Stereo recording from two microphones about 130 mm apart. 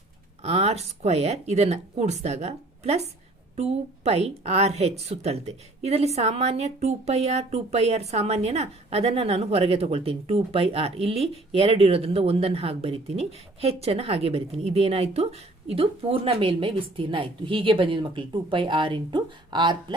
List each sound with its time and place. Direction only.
0.4 s a woman's voice: 55° right (ahead or behind); by 20.0 s 35° right (ahead or behind)